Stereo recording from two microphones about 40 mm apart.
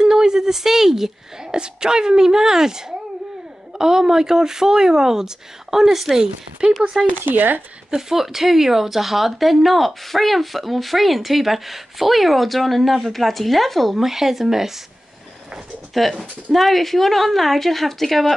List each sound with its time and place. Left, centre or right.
0.0 s a sound: centre
1.5 s speech: centre
6.6 s speech: right
7.2 s speech: right
7.9 s speech: centre
15.9 s speech: centre